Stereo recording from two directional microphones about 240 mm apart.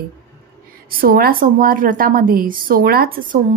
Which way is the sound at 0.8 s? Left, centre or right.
Right.